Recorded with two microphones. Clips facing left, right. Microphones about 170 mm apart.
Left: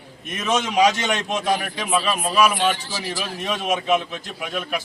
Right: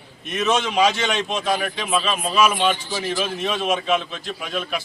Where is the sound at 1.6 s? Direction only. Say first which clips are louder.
Even; centre (ahead or behind).